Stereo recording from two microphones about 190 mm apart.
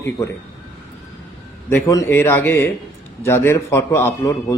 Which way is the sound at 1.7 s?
15° left (ahead or behind).